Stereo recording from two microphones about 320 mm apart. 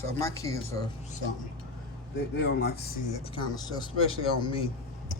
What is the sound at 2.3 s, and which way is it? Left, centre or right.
Speech, left.